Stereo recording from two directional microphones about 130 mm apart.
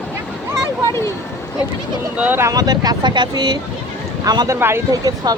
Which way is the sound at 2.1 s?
15° right (ahead or behind).